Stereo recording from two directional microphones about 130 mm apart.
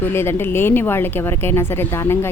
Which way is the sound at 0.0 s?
20° left (ahead or behind).